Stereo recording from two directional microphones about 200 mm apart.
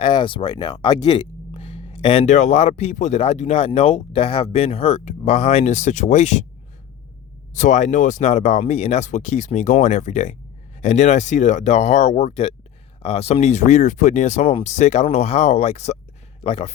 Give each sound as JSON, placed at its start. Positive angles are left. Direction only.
{"t": 0.0, "sound": "speech", "side_deg": 25}
{"t": 7.5, "sound": "speech", "side_deg": 35}